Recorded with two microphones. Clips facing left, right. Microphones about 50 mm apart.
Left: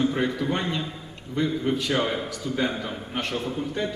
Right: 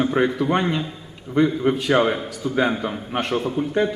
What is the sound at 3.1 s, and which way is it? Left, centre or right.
Speech, right.